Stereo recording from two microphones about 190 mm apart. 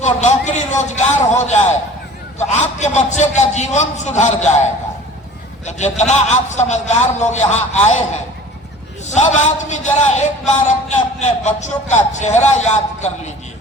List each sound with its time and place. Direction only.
0.0 s a man's voice: 40° left (ahead or behind)
5.6 s a man's voice: 35° left (ahead or behind)
9.3 s a man's voice: 40° left (ahead or behind)